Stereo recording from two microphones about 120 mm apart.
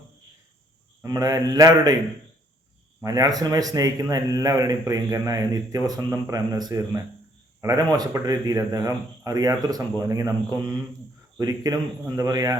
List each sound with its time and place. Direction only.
1.0 s a man's voice: 30° right (ahead or behind)
3.0 s a man's voice: 30° right (ahead or behind)